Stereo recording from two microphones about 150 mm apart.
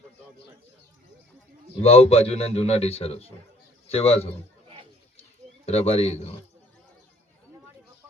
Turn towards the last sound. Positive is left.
turn(degrees=45)  # may be behind; listen again after turning